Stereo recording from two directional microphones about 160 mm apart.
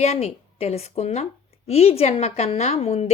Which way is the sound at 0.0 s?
40° left (ahead or behind).